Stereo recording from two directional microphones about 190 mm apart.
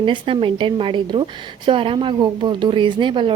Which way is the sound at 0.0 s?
25° right (ahead or behind).